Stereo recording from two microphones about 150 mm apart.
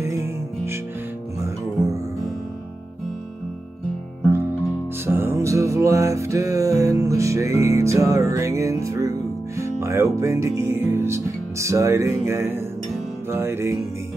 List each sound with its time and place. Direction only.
0.0 s music: 20° right (ahead or behind)
4.3 s music: 15° right (ahead or behind)